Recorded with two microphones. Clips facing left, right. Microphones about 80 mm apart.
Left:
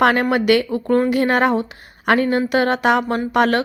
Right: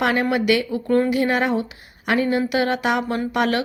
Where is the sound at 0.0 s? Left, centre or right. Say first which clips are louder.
Left 4 dB; left.